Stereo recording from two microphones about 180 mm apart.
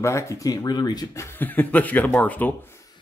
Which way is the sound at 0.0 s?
15° left (ahead or behind).